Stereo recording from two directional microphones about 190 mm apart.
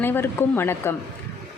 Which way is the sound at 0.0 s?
10° left (ahead or behind).